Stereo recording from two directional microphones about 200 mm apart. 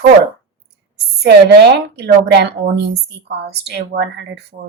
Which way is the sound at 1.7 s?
55° right (ahead or behind).